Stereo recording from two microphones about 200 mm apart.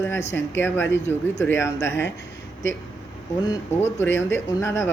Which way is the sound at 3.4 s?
20° left (ahead or behind).